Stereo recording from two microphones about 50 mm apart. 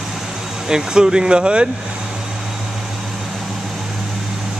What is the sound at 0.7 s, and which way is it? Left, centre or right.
Speech, centre.